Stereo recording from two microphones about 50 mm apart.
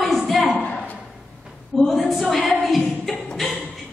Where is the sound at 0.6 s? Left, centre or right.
Left.